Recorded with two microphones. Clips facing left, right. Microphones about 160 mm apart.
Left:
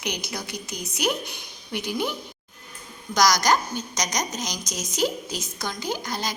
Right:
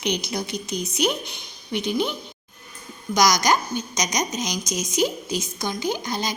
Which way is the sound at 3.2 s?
15° right (ahead or behind).